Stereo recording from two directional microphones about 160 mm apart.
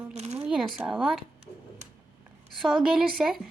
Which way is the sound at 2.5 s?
Centre (ahead or behind).